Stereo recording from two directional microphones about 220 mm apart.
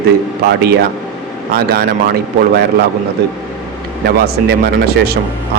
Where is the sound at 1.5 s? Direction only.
45° right (ahead or behind).